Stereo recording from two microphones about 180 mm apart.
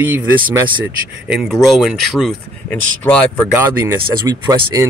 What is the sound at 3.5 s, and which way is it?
Speech, 15° right (ahead or behind).